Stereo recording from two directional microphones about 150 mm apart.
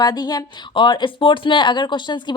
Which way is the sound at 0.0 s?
25° left (ahead or behind).